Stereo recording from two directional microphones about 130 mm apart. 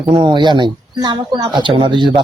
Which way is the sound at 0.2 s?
35° right (ahead or behind).